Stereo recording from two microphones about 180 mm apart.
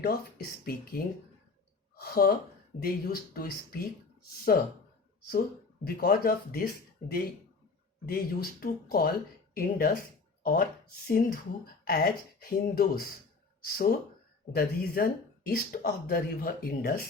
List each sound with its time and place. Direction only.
0.0 s speech: 55° left (ahead or behind)
8.0 s speech: 55° left (ahead or behind)
14.5 s speech: 55° left (ahead or behind)